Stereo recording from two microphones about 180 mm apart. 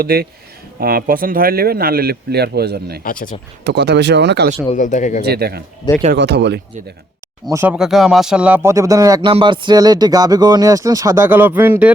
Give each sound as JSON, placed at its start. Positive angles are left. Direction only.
{"t": 0.0, "sound": "speech", "side_deg": -60}
{"t": 3.0, "sound": "speech", "side_deg": 50}
{"t": 3.6, "sound": "speech", "side_deg": -70}
{"t": 4.7, "sound": "speech", "side_deg": 45}
{"t": 5.2, "sound": "speech", "side_deg": -60}
{"t": 7.5, "sound": "speech", "side_deg": -10}